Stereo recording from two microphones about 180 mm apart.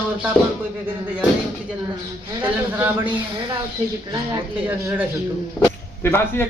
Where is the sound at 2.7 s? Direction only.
10° right (ahead or behind).